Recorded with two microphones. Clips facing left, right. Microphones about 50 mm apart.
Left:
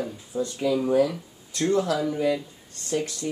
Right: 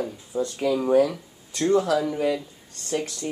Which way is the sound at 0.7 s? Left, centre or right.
Right.